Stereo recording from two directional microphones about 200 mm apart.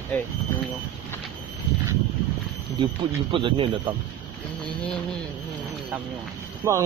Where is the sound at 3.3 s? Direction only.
25° right (ahead or behind).